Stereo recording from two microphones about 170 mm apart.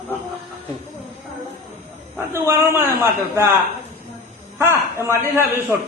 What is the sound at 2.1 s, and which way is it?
Speech, 15° right (ahead or behind).